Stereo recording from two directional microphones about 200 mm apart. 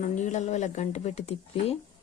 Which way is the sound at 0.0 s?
35° left (ahead or behind).